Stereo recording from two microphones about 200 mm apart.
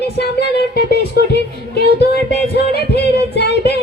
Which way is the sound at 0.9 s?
55° left (ahead or behind).